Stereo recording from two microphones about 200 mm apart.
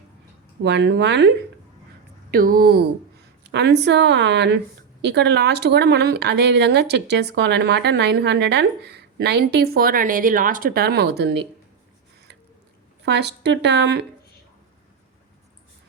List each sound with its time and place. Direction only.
0.6 s speech: 60° right (ahead or behind)
2.3 s speech: 45° right (ahead or behind)
13.1 s speech: 60° right (ahead or behind)